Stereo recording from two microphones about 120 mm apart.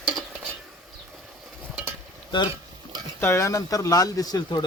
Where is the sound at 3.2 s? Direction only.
25° left (ahead or behind).